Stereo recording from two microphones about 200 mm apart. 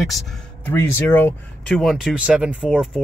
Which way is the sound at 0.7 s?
10° left (ahead or behind).